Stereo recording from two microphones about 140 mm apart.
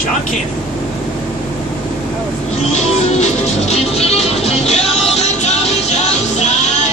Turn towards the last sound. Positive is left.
turn(degrees=50)  # may be behind; listen again after turning